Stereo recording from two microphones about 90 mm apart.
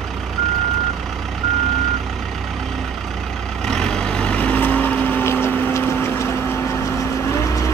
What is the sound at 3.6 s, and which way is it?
Vehicle, 5° left (ahead or behind).